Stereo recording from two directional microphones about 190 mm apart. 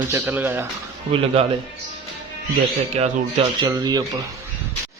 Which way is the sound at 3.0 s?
35° right (ahead or behind).